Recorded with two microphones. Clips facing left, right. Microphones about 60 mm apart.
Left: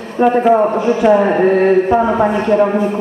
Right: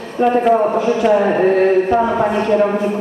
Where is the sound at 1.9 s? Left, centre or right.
Centre.